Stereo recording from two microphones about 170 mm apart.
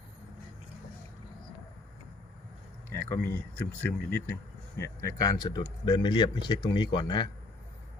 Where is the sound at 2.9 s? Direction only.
10° left (ahead or behind).